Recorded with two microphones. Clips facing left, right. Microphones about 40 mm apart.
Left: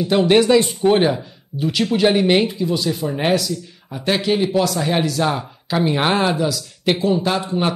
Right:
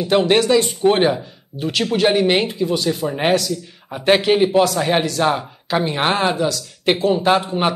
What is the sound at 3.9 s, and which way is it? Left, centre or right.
A man's voice, right.